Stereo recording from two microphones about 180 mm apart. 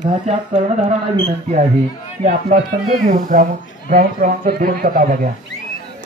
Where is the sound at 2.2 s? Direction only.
55° right (ahead or behind).